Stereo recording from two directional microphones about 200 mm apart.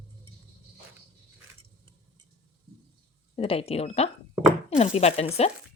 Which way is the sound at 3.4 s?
30° left (ahead or behind).